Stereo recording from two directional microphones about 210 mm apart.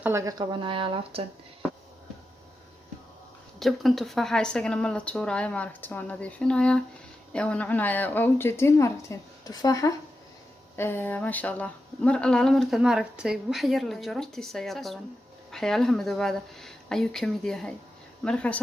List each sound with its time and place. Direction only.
0.0 s speech: 15° right (ahead or behind)
3.6 s a woman's voice: centre (ahead or behind)